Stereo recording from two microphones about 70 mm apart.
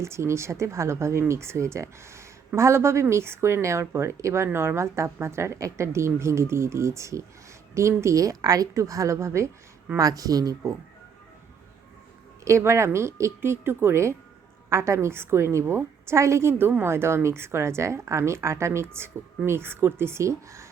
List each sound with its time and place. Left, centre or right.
0.0 s a woman's voice: right
10.0 s speech: right
12.5 s speech: right